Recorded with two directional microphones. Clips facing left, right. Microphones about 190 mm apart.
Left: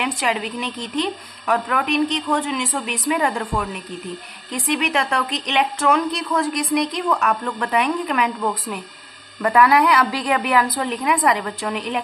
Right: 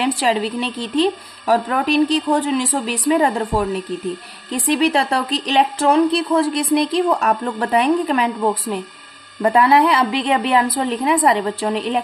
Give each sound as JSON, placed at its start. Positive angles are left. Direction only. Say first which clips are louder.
{"t": 0.0, "sound": "a woman's voice", "louder": "right 5 dB", "side_deg": -35}